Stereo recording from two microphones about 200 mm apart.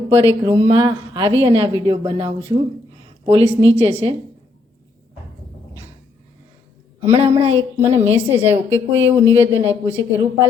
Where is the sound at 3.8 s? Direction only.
30° right (ahead or behind).